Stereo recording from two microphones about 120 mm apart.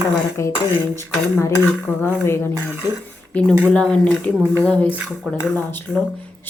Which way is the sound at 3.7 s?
10° left (ahead or behind).